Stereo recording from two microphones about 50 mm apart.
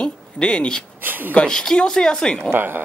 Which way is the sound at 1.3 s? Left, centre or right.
Centre.